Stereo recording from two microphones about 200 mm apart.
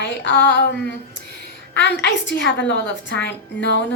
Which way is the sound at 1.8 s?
65° left (ahead or behind).